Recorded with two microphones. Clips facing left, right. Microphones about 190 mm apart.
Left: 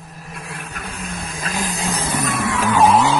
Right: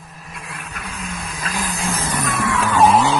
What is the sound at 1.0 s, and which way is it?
Vacuum cleaner, 30° left (ahead or behind).